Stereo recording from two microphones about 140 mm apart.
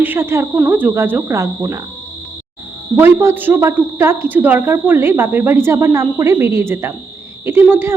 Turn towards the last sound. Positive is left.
turn(degrees=-15)  # may be behind; listen again after turning